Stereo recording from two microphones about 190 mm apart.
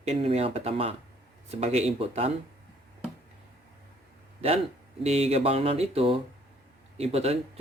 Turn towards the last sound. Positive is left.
turn(degrees=-35)  # may be behind; listen again after turning